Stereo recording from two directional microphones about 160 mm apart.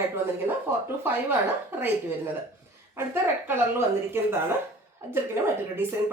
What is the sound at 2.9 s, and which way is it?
Speech, 15° right (ahead or behind).